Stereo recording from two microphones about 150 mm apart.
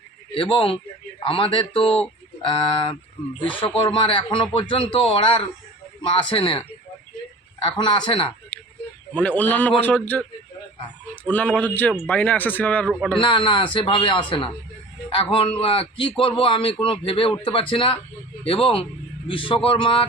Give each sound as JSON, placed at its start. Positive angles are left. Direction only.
{"t": 0.3, "sound": "speech", "side_deg": 35}
{"t": 8.5, "sound": "a sound", "side_deg": 10}
{"t": 9.1, "sound": "a man's voice", "side_deg": 10}
{"t": 13.2, "sound": "speech", "side_deg": 35}